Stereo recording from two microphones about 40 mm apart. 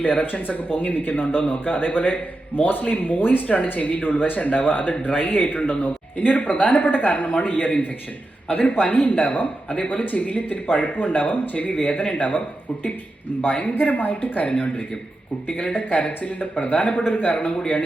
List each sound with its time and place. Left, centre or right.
0.0 s a woman's voice: left
3.4 s speech: left
3.7 s a woman's voice: left
13.4 s a woman's voice: left
14.2 s a woman's voice: left